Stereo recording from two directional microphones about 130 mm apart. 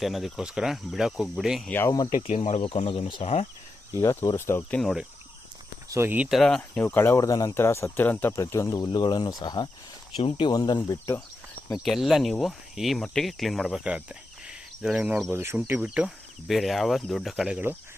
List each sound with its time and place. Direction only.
0.0 s speech: centre (ahead or behind)
2.0 s speech: 85° left; by 3.4 s 55° left (ahead or behind)
3.9 s speech: 25° left (ahead or behind)
4.8 s speech: centre (ahead or behind)
5.9 s speech: 15° right (ahead or behind)
6.2 s speech: centre (ahead or behind)
6.6 s speech: 15° left (ahead or behind)
7.2 s speech: 30° left (ahead or behind)
10.2 s speech: 45° left (ahead or behind)
10.5 s speech: 30° left (ahead or behind)
11.9 s speech: centre (ahead or behind)
15.3 s speech: 20° right (ahead or behind); by 17.6 s 5° right (ahead or behind)